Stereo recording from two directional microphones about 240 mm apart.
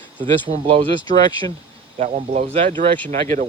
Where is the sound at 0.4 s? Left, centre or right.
Right.